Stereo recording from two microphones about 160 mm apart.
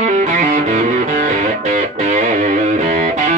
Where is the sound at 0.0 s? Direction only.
45° right (ahead or behind).